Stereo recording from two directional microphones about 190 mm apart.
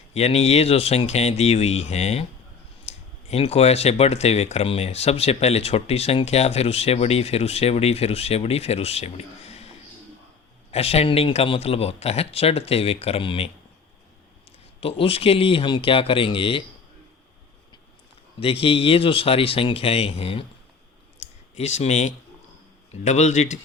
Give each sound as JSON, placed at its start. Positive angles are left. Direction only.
{"t": 0.1, "sound": "speech", "side_deg": 35}
{"t": 10.7, "sound": "speech", "side_deg": 30}
{"t": 14.8, "sound": "speech", "side_deg": 30}
{"t": 18.3, "sound": "speech", "side_deg": 30}
{"t": 21.2, "sound": "clicking", "side_deg": 35}
{"t": 23.0, "sound": "speech", "side_deg": 35}